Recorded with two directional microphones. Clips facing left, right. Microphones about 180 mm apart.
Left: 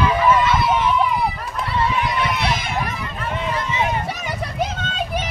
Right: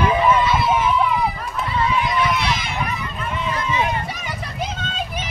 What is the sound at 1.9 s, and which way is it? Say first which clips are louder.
Run: right 1 dB; 55° left (ahead or behind).